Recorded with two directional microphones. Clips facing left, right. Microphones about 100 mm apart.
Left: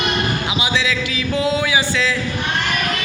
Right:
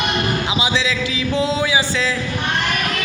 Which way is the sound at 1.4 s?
30° right (ahead or behind).